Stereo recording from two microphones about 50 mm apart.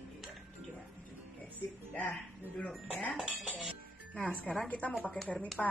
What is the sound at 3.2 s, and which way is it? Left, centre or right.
Music, centre.